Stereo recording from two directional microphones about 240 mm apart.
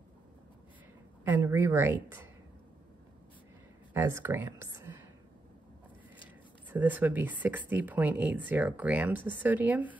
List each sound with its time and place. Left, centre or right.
1.2 s speech: centre
3.9 s speech: centre
6.7 s speech: centre